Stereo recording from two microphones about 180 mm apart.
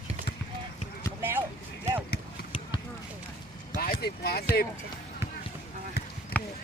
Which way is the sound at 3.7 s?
50° left (ahead or behind).